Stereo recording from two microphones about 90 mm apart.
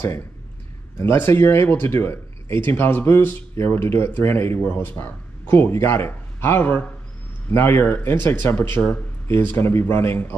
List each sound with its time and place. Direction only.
0.9 s speech: 25° left (ahead or behind)